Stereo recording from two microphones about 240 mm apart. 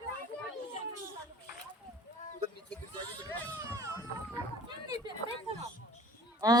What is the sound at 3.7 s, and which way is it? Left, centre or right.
Baby cry, centre.